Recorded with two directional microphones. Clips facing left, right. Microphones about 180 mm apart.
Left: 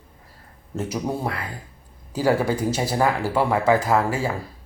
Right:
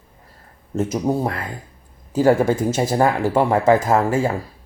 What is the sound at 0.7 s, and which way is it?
Speech, 45° right (ahead or behind).